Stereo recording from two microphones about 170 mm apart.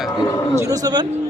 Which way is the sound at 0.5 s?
20° right (ahead or behind).